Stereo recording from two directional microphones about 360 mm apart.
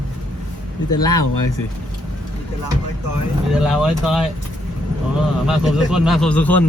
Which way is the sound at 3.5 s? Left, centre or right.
Centre.